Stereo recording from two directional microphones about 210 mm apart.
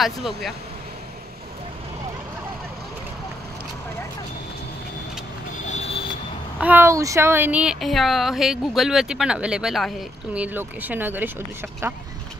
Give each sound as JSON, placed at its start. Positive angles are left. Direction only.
{"t": 0.0, "sound": "speech", "side_deg": 0}
{"t": 5.7, "sound": "vehicle", "side_deg": 35}
{"t": 6.6, "sound": "speech", "side_deg": -10}